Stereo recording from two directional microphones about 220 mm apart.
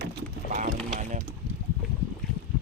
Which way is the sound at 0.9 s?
35° right (ahead or behind).